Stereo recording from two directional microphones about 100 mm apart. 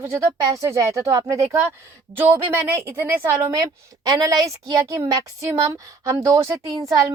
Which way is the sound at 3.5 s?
35° right (ahead or behind).